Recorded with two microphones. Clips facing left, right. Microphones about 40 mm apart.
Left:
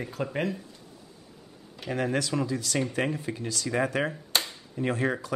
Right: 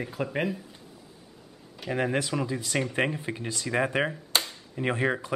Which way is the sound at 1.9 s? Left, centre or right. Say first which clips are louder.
Even; centre.